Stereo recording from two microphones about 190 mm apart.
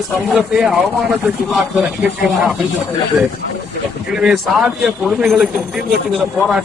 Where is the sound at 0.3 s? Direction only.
5° right (ahead or behind).